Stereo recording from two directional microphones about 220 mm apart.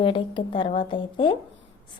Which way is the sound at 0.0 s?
25° left (ahead or behind).